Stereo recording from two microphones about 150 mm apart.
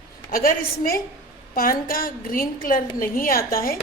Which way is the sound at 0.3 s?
70° left (ahead or behind).